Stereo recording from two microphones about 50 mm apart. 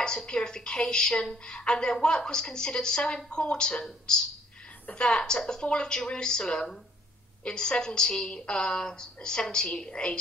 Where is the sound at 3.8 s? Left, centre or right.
Centre.